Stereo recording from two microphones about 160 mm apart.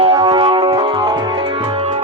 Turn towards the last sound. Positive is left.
turn(degrees=-30)  # may be behind; listen again after turning